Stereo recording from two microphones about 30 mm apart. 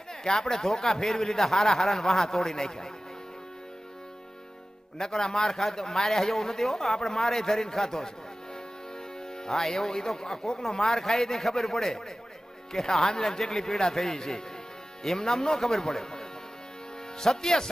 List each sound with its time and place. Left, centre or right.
0.1 s speech: centre
4.9 s a man's voice: centre
9.5 s a man's voice: centre